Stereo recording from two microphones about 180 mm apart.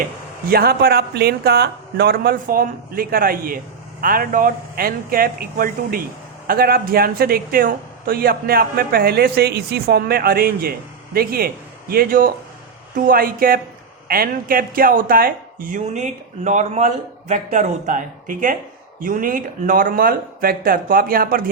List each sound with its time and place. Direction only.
0.5 s speech: 60° right (ahead or behind)